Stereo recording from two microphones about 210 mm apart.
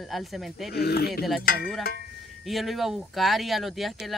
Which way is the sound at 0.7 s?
50° left (ahead or behind).